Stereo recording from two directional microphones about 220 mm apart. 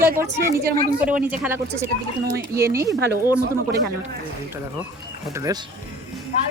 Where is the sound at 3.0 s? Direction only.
45° right (ahead or behind).